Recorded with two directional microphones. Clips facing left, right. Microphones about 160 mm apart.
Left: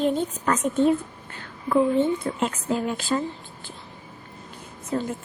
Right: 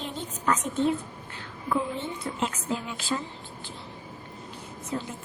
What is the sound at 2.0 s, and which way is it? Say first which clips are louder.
A woman's voice: left 8 dB; 55° left (ahead or behind).